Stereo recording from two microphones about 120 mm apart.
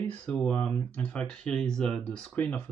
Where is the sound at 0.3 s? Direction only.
10° left (ahead or behind).